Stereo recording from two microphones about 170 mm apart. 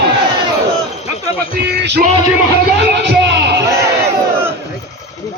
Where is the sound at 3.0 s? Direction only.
90° right.